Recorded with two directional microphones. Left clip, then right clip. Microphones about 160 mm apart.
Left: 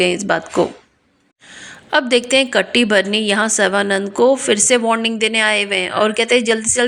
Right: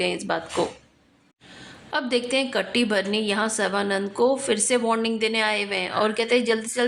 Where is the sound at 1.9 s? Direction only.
40° left (ahead or behind).